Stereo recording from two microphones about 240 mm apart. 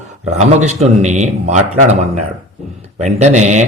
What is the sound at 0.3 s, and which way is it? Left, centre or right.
A man's voice, right.